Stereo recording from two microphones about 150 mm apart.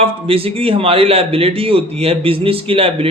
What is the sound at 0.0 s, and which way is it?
A man's voice, 40° right (ahead or behind).